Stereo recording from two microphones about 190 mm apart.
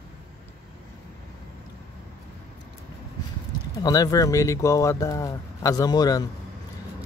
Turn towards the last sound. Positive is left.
turn(degrees=20)  # may be behind; listen again after turning